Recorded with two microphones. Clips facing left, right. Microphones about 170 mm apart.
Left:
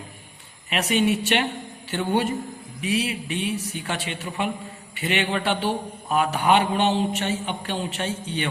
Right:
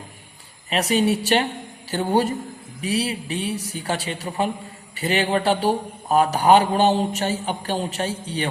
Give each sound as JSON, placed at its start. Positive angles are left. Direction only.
{"t": 0.7, "sound": "a man's voice", "side_deg": -35}